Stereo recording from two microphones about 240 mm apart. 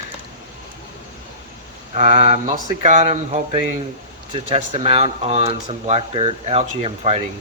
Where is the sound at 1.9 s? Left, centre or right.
Right.